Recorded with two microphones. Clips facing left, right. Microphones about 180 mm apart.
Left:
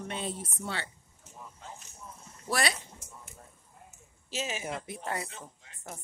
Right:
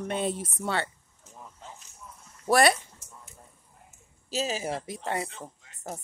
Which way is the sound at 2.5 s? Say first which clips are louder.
Right 9 dB; 55° right (ahead or behind).